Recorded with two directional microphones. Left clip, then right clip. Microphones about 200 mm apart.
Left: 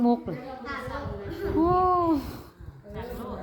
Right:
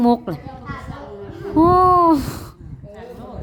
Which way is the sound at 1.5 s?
40° right (ahead or behind).